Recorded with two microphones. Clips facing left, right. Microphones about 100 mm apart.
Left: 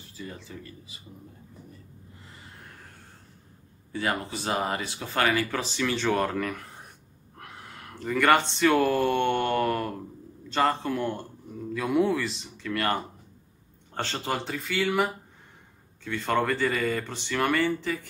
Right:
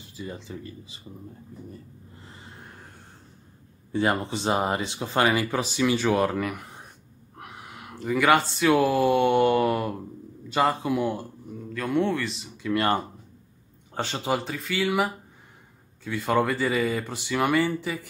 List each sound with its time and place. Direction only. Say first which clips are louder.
0.1 s speech: right 4 dB; 20° right (ahead or behind)
3.9 s speech: right 5 dB; 25° right (ahead or behind); by 11.6 s 5° right (ahead or behind)
11.7 s speech: left 1 dB; 5° left (ahead or behind)
12.6 s speech: right 4 dB; 25° right (ahead or behind)
13.9 s speech: right 3 dB; 15° right (ahead or behind)
14.4 s speech: right 1 dB; centre (ahead or behind)